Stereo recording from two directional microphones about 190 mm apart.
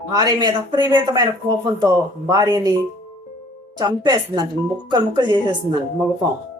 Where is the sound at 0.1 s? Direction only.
20° right (ahead or behind).